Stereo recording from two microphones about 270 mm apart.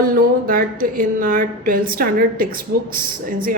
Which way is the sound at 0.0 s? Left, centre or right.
Right.